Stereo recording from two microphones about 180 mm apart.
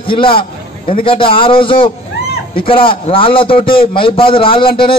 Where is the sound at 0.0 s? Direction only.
30° left (ahead or behind).